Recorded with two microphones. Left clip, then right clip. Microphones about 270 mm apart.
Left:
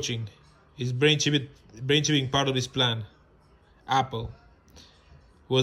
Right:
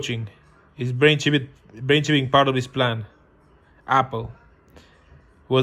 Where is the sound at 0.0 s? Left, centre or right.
Centre.